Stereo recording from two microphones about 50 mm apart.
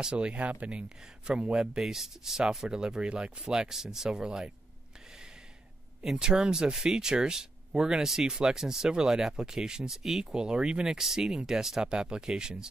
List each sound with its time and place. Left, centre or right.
0.0 s a man's voice: right
6.0 s speech: centre